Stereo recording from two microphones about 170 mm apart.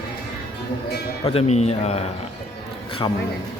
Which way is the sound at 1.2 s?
35° left (ahead or behind).